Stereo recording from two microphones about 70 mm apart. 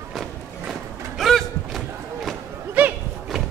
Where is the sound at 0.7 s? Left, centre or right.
Centre.